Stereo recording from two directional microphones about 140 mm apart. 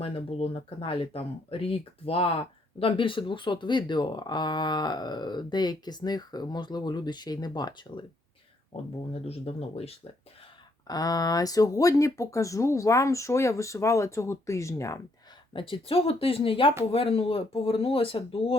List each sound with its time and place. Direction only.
0.0 s speech: 45° left (ahead or behind)
8.7 s speech: 45° left (ahead or behind)
10.8 s speech: 25° left (ahead or behind)
15.5 s speech: 40° left (ahead or behind)